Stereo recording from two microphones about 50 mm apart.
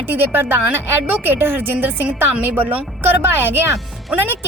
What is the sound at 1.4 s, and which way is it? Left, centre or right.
Speech, right.